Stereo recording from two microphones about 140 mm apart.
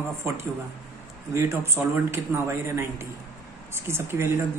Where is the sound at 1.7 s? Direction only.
15° right (ahead or behind).